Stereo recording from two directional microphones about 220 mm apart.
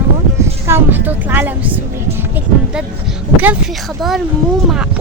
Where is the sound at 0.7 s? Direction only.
10° right (ahead or behind).